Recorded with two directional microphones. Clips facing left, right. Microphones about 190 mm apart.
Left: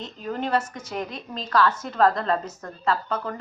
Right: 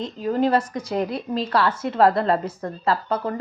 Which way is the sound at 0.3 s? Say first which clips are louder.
Right 5 dB; 35° right (ahead or behind).